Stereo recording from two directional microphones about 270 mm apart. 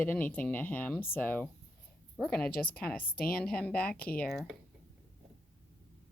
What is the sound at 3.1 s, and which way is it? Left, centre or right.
Speech, left.